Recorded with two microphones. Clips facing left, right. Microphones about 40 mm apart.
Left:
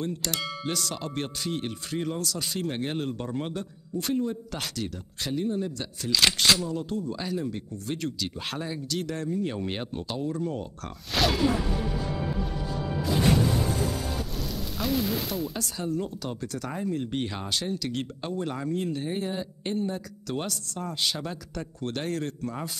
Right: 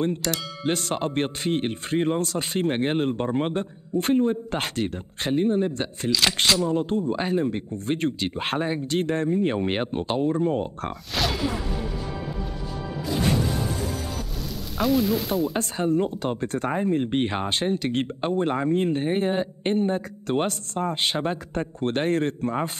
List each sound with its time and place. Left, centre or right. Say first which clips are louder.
0.7 s speech: right 12 dB; right
6.2 s speech: left 1 dB; centre
6.6 s speech: right 7 dB; right
11.1 s a sound: left 2 dB; centre
14.8 s speech: right 6 dB; centre
15.5 s speech: right 7 dB; right